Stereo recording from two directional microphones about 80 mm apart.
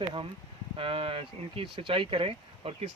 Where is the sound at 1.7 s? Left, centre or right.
Right.